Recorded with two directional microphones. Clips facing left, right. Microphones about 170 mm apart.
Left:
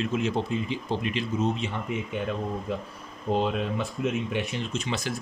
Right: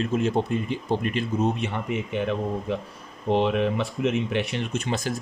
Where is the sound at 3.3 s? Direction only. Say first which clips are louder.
Right 4 dB; 75° right (ahead or behind); by 5.1 s 50° right (ahead or behind).